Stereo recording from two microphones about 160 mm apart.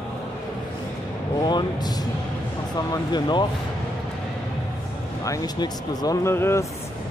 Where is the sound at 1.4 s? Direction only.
25° left (ahead or behind).